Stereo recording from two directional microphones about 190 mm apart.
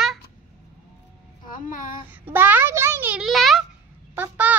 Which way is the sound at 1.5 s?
45° left (ahead or behind).